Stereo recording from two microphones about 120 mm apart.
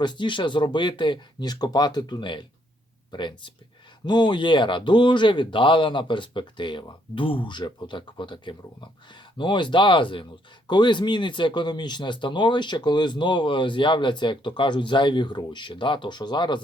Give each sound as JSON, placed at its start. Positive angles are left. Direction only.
{"t": 0.0, "sound": "speech", "side_deg": 40}